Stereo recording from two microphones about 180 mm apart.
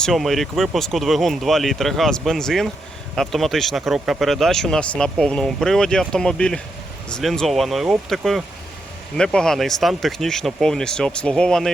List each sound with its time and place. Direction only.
0.0 s speech: centre (ahead or behind)